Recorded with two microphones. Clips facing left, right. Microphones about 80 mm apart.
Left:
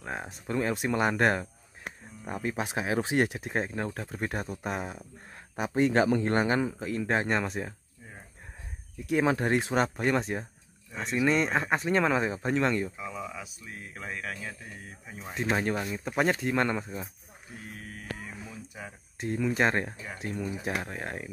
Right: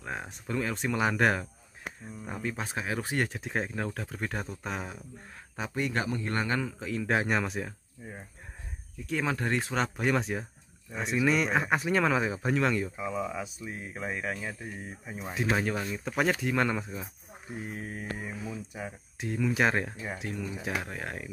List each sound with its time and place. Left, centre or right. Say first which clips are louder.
0.0 s a sound: left 1 dB; centre
0.6 s speech: left 2 dB; centre
2.5 s speech: left 7 dB; centre
3.3 s speech: left 1 dB; centre
5.8 s speech: left 8 dB; left
6.3 s speech: left 4 dB; centre
6.8 s speech: even; centre
9.2 s speech: left 4 dB; left
9.8 s speech: left 2 dB; centre
12.9 s speech: right 5 dB; centre
15.5 s speech: left 2 dB; centre
17.6 s a sound: right 6 dB; right
18.9 s speech: left 6 dB; centre